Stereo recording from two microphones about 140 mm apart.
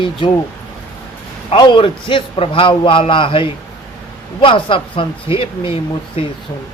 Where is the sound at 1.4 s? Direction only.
35° left (ahead or behind).